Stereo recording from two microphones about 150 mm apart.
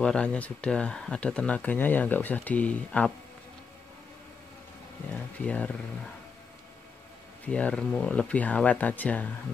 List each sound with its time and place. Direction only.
0.0 s speech: 5° left (ahead or behind)
5.1 s speech: 10° left (ahead or behind)
7.4 s speech: 10° left (ahead or behind)